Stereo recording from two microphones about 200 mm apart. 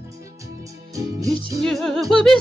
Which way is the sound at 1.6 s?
Centre (ahead or behind).